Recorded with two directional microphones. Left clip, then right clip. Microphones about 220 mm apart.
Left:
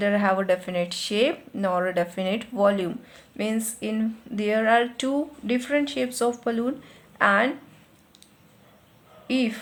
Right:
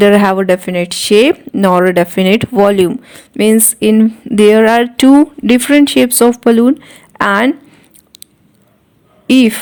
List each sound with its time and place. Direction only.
0.0 s speech: 45° right (ahead or behind)
9.2 s speech: 50° right (ahead or behind)